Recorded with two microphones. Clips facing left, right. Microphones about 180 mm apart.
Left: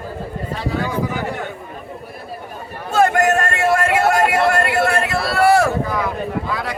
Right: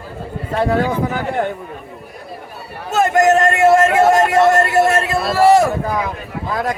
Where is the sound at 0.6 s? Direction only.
55° right (ahead or behind).